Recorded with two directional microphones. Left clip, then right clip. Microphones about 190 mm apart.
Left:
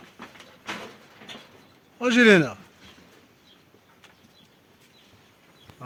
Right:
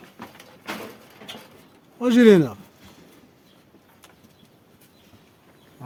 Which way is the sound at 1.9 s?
20° right (ahead or behind).